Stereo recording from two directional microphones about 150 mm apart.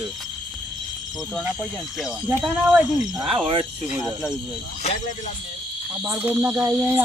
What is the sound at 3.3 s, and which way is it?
Cricket, 35° right (ahead or behind).